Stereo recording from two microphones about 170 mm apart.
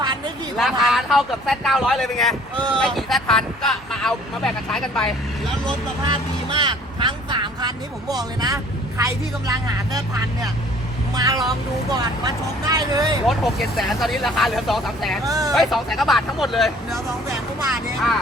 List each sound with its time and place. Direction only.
0.5 s speech: centre (ahead or behind)
6.1 s a man's voice: 30° right (ahead or behind)
11.1 s a man's voice: 20° right (ahead or behind)
13.2 s speech: centre (ahead or behind)
15.2 s a man's voice: 20° right (ahead or behind)
15.5 s speech: centre (ahead or behind)